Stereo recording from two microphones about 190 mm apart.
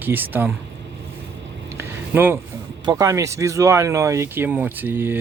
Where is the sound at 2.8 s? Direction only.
20° right (ahead or behind).